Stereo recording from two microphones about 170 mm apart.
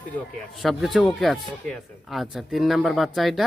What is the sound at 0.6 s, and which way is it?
Speech, centre (ahead or behind).